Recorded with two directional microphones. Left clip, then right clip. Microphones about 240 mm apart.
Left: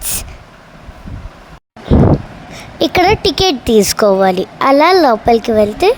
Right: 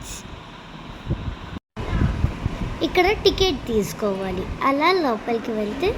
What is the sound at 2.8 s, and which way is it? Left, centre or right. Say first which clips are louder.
A woman's voice: left 8 dB; left.